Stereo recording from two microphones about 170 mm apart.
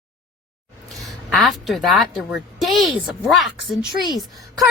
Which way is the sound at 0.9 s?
Centre (ahead or behind).